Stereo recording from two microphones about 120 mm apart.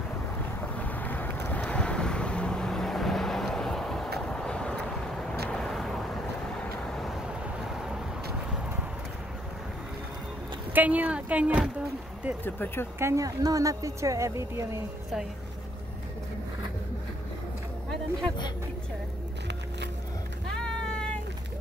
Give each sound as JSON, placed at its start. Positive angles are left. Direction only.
{"t": 0.7, "sound": "wind noise", "side_deg": 15}
{"t": 5.5, "sound": "vehicle", "side_deg": 5}
{"t": 10.7, "sound": "speech", "side_deg": -15}
{"t": 12.4, "sound": "speech", "side_deg": 15}
{"t": 13.0, "sound": "a woman's voice", "side_deg": -25}
{"t": 20.5, "sound": "vehicle", "side_deg": 5}